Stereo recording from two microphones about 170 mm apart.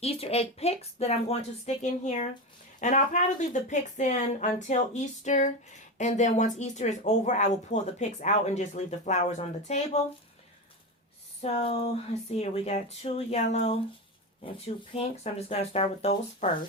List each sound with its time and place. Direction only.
0.0 s speech: 35° left (ahead or behind)
11.4 s speech: 35° left (ahead or behind)
14.9 s speech: 40° left (ahead or behind)